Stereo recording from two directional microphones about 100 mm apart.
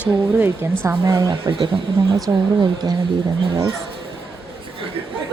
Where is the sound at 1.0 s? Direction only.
35° right (ahead or behind).